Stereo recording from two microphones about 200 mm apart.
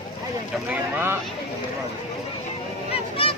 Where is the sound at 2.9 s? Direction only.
30° left (ahead or behind).